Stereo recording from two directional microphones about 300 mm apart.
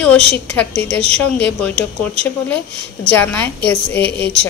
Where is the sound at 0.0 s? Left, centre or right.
Centre.